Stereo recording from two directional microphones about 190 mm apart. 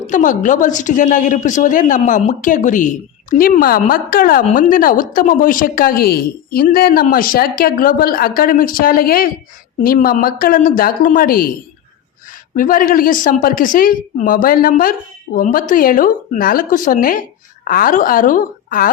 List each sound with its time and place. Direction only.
0.1 s a woman's voice: 40° left (ahead or behind)
12.5 s a woman's voice: 45° left (ahead or behind)